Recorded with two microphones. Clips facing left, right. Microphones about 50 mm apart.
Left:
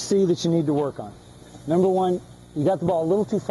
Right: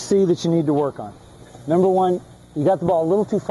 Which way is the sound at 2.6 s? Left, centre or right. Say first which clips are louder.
Right 4 dB; centre.